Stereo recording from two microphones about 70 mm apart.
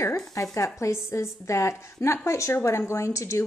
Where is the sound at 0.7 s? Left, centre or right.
Left.